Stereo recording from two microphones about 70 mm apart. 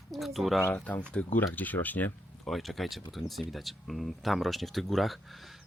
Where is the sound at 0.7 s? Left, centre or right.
Centre.